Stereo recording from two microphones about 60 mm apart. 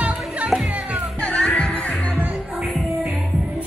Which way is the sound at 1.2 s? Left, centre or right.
Left.